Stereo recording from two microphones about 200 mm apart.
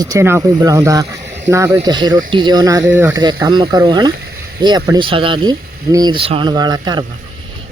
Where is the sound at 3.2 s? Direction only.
20° right (ahead or behind).